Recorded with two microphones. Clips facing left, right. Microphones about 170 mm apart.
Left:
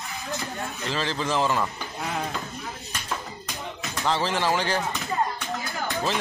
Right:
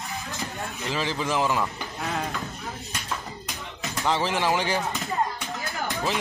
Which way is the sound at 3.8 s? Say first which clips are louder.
Right 1 dB; 15° right (ahead or behind).